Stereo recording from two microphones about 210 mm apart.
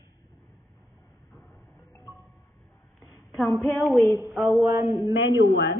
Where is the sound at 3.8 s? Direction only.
Centre (ahead or behind).